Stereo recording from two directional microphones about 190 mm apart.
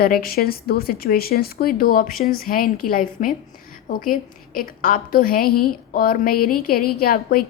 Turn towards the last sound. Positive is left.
turn(degrees=50)  # may be behind; listen again after turning